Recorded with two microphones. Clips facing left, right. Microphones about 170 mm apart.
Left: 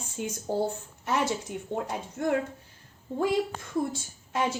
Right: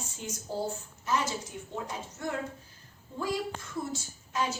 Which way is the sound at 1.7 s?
55° left (ahead or behind).